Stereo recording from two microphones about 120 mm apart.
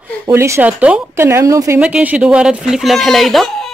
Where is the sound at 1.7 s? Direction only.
10° right (ahead or behind).